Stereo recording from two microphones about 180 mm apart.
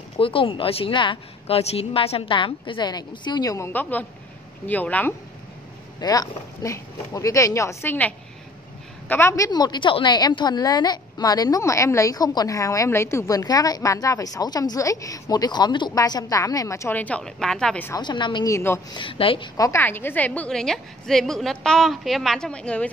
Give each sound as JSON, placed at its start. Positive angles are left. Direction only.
{"t": 0.2, "sound": "a woman's voice", "side_deg": 30}
{"t": 5.9, "sound": "speech", "side_deg": 20}
{"t": 9.1, "sound": "a woman's voice", "side_deg": 15}
{"t": 17.9, "sound": "a woman's voice", "side_deg": 25}
{"t": 18.9, "sound": "a woman's voice", "side_deg": 30}